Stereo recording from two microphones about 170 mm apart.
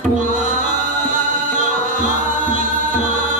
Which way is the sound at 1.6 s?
50° right (ahead or behind).